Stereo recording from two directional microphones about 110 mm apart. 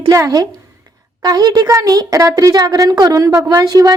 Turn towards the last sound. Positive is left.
turn(degrees=-35)  # may be behind; listen again after turning